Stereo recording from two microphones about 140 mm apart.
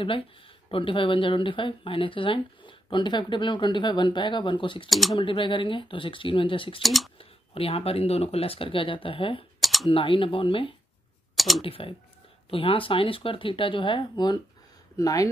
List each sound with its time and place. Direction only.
0.7 s speech: 40° left (ahead or behind)
4.8 s speech: centre (ahead or behind)
5.1 s speech: 35° left (ahead or behind)
6.8 s speech: centre (ahead or behind)
7.2 s speech: 45° left (ahead or behind)
9.6 s typing: centre (ahead or behind)
9.8 s speech: 40° left (ahead or behind)
11.3 s speech: centre (ahead or behind)
11.6 s speech: 40° left (ahead or behind); by 15.2 s 25° left (ahead or behind)